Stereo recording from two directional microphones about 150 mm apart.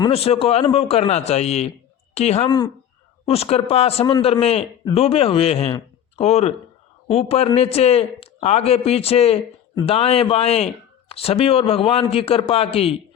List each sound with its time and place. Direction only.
0.1 s a man's voice: 40° left (ahead or behind)